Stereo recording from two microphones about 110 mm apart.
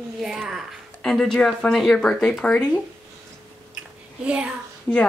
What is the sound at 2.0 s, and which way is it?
Speech, 5° left (ahead or behind).